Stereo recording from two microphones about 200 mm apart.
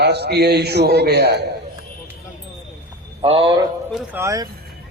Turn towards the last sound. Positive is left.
turn(degrees=-15)  # may be behind; listen again after turning